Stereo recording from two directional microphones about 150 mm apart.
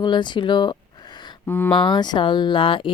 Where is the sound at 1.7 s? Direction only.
30° left (ahead or behind).